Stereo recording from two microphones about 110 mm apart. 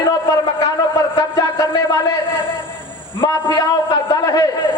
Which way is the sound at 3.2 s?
35° left (ahead or behind).